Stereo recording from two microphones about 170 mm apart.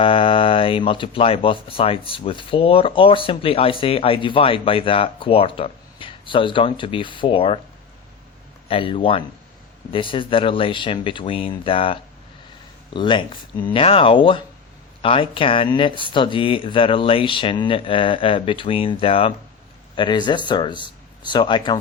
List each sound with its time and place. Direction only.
0.0 s speech: 30° left (ahead or behind)
8.6 s speech: 30° left (ahead or behind)